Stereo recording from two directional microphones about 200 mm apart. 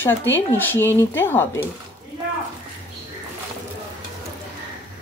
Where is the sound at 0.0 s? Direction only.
10° left (ahead or behind).